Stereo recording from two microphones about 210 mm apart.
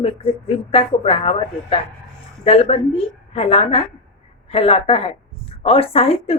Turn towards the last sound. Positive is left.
turn(degrees=30)  # may be behind; listen again after turning